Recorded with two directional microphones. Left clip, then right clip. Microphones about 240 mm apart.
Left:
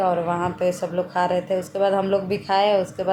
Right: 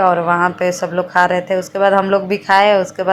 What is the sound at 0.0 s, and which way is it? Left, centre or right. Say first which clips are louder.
A woman's voice: right 9 dB; centre.